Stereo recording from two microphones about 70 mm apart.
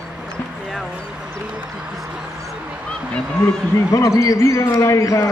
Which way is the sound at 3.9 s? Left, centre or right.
Left.